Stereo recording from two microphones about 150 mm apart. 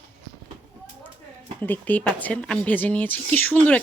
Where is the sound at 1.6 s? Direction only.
10° left (ahead or behind).